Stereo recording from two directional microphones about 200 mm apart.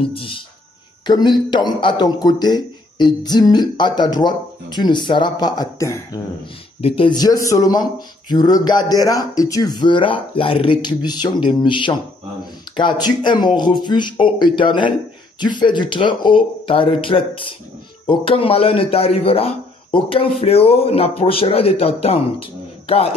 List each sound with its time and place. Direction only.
0.1 s a man's voice: 25° left (ahead or behind)